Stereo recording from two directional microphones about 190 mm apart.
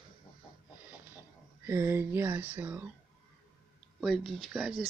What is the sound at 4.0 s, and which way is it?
Speech, centre (ahead or behind).